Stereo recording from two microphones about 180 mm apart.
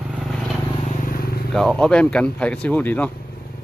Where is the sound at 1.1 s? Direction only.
55° left (ahead or behind).